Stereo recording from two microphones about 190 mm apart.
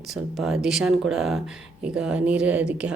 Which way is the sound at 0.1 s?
Centre (ahead or behind).